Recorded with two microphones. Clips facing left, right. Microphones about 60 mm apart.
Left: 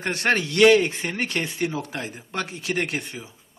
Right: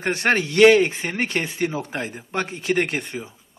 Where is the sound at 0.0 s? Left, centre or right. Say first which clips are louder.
Right 2 dB; right.